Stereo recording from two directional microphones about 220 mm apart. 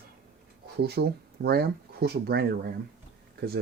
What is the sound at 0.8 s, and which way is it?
Speech, 45° right (ahead or behind).